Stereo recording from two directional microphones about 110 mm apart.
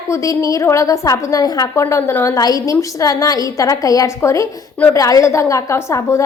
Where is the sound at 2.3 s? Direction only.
35° left (ahead or behind).